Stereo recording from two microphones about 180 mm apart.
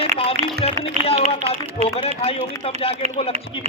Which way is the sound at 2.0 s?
35° left (ahead or behind).